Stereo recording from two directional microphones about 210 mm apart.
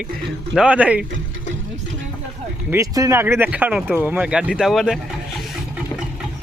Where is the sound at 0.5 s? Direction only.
5° right (ahead or behind).